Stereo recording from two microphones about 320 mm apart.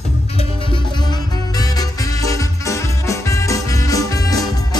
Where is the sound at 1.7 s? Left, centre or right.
Centre.